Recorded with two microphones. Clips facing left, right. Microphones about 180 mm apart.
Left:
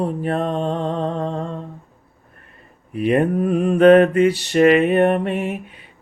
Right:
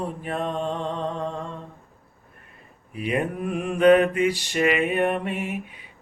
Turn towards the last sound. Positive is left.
turn(degrees=45)  # may be behind; listen again after turning